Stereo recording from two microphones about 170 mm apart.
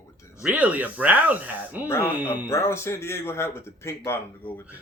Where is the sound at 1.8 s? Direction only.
15° left (ahead or behind).